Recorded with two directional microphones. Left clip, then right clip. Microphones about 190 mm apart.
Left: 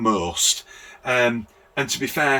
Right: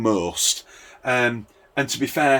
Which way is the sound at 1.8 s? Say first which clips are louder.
Right 2 dB; 40° right (ahead or behind).